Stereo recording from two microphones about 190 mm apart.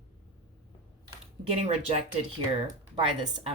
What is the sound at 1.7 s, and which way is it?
Speech, 30° right (ahead or behind).